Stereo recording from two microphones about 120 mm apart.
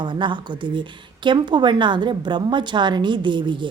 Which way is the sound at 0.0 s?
40° right (ahead or behind).